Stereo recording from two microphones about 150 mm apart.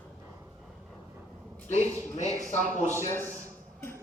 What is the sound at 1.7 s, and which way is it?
Speech, 50° left (ahead or behind).